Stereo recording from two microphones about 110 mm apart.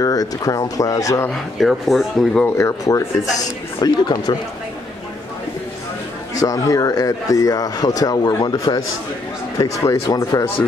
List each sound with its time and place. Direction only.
0.0 s speech: 35° left (ahead or behind)
1.3 s speech: centre (ahead or behind)
2.4 s speech: 25° left (ahead or behind)
6.3 s speech: 30° left (ahead or behind)